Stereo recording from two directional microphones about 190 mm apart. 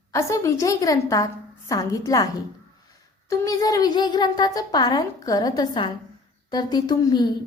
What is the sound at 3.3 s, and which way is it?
A woman's voice, 20° left (ahead or behind).